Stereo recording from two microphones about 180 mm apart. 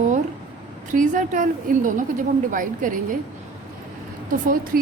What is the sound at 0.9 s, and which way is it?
A woman's voice, 45° right (ahead or behind).